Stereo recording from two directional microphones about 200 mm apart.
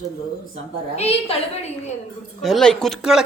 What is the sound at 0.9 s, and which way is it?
Speech, 30° left (ahead or behind).